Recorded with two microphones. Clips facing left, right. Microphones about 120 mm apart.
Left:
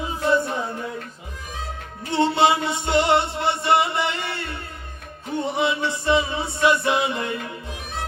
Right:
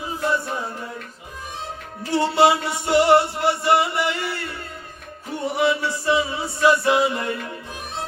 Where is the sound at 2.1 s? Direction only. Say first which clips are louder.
Right 1 dB; 20° left (ahead or behind).